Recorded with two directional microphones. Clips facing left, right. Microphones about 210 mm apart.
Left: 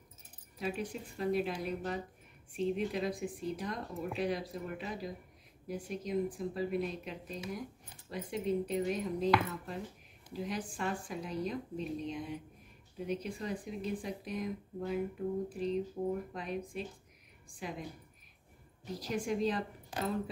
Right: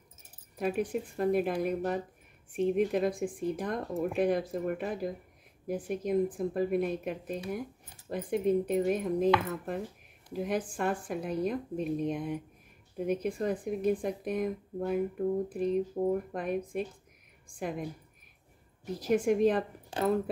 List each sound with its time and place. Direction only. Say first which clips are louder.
0.6 s speech: right 7 dB; 55° right (ahead or behind)
19.0 s speech: right 8 dB; 55° right (ahead or behind)